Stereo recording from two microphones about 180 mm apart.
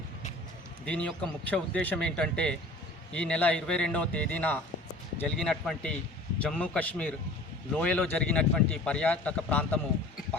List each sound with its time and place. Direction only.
0.9 s a man's voice: 5° left (ahead or behind)